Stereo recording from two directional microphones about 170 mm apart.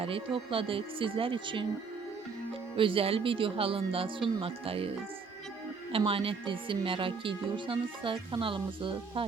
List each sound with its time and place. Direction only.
0.0 s speech: 35° right (ahead or behind)
2.7 s speech: 30° right (ahead or behind)
6.1 s speech: 30° right (ahead or behind)